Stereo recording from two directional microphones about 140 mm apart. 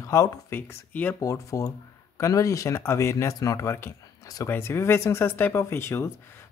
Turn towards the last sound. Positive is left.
turn(degrees=20)  # may be behind; listen again after turning